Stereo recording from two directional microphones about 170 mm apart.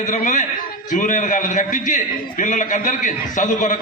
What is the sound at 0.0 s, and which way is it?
A man's voice, 45° left (ahead or behind).